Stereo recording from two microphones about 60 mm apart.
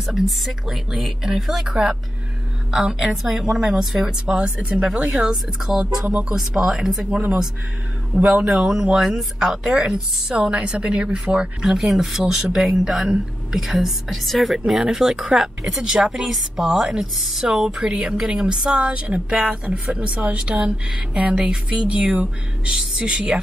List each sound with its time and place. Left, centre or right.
0.0 s speech: centre
4.3 s speech: centre
4.8 s speech: centre
11.6 s speech: centre
14.7 s speech: centre